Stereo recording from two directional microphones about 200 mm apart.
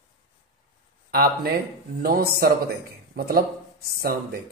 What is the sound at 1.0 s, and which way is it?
Speech, 50° right (ahead or behind).